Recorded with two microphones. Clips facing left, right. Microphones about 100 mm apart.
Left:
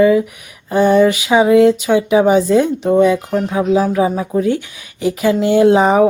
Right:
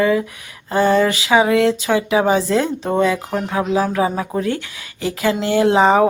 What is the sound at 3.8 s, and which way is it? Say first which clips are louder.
Speech: left 3 dB; 5° left (ahead or behind).